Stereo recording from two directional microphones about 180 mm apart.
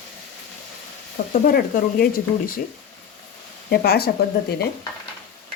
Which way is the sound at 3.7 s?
60° left (ahead or behind).